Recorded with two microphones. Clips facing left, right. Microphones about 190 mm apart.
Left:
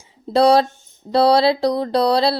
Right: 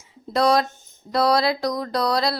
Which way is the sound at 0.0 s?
30° left (ahead or behind).